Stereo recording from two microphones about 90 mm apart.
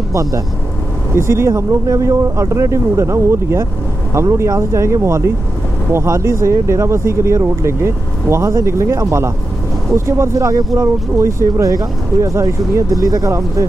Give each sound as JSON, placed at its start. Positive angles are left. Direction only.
{"t": 0.1, "sound": "speech", "side_deg": -35}